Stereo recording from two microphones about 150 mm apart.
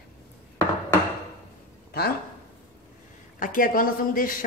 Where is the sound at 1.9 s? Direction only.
90° left.